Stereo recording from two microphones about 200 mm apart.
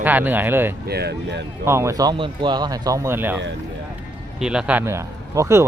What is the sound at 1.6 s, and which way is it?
Speech, 15° right (ahead or behind).